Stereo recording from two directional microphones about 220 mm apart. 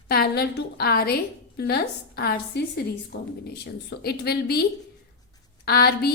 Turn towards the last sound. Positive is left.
turn(degrees=45)  # may be behind; listen again after turning